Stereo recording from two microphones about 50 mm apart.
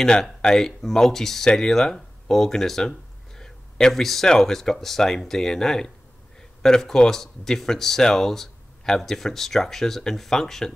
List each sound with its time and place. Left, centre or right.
0.0 s speech: centre